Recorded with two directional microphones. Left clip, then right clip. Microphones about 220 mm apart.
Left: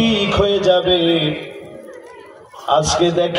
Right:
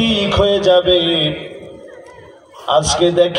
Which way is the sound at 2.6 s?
40° right (ahead or behind).